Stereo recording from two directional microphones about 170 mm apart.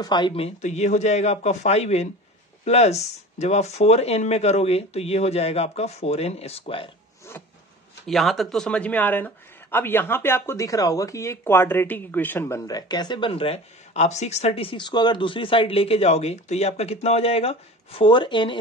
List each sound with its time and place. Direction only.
0.0 s speech: 25° left (ahead or behind)
8.1 s speech: centre (ahead or behind); by 18.6 s 30° left (ahead or behind)